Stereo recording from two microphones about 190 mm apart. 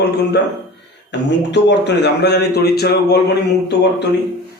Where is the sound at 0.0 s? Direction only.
60° left (ahead or behind).